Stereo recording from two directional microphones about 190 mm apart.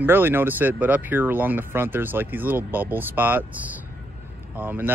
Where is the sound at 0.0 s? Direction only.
10° right (ahead or behind).